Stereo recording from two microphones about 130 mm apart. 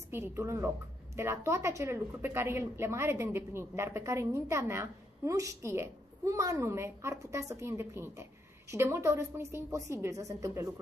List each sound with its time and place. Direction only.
0.1 s a woman's voice: 20° right (ahead or behind)